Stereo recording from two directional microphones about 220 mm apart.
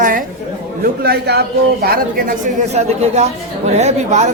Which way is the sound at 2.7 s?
30° right (ahead or behind).